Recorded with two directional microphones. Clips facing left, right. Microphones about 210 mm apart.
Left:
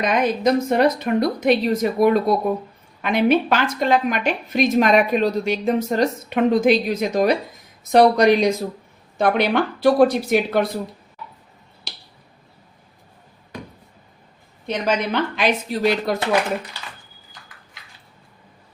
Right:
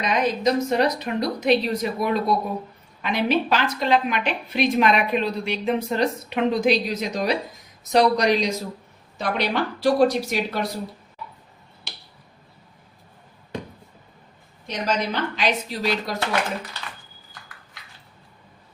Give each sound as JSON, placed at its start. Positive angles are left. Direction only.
{"t": 0.0, "sound": "a woman's voice", "side_deg": 55}
{"t": 11.9, "sound": "finger snapping", "side_deg": 35}
{"t": 14.7, "sound": "speech", "side_deg": 55}